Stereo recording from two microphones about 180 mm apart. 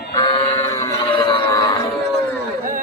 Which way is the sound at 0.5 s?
20° left (ahead or behind).